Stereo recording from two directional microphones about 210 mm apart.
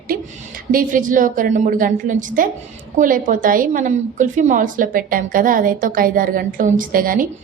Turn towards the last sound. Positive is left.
turn(degrees=-45)  # may be behind; listen again after turning